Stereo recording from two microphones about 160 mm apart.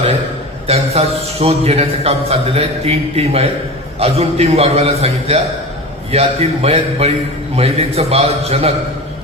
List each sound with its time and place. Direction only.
0.7 s a man's voice: 40° right (ahead or behind)